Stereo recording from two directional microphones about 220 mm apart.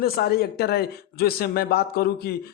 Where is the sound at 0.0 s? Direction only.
45° left (ahead or behind).